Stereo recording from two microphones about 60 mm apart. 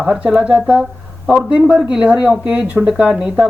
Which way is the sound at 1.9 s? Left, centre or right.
Centre.